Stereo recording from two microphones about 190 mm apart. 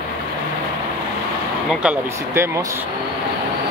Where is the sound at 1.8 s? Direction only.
15° right (ahead or behind).